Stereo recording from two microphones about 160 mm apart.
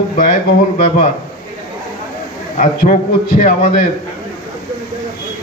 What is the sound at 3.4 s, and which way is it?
Speech, 55° left (ahead or behind).